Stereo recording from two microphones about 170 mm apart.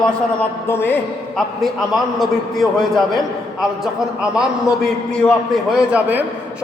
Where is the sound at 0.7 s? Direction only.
15° left (ahead or behind).